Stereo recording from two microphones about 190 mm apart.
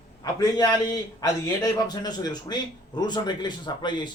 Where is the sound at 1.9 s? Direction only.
20° left (ahead or behind).